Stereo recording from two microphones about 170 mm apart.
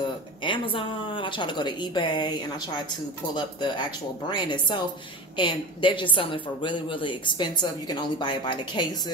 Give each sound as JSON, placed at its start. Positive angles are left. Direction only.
{"t": 0.4, "sound": "speech", "side_deg": 30}